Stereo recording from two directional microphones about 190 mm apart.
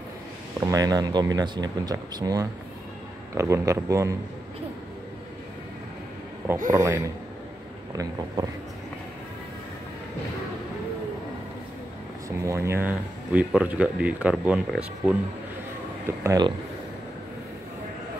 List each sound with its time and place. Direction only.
0.6 s speech: 20° right (ahead or behind)
6.7 s speech: 20° right (ahead or behind)
12.3 s speech: 15° right (ahead or behind)
16.3 s speech: 20° right (ahead or behind)